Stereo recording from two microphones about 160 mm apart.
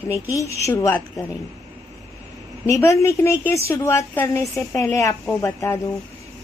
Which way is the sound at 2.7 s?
20° left (ahead or behind).